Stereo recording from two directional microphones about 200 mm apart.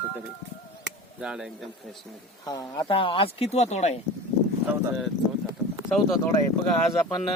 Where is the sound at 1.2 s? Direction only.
5° right (ahead or behind).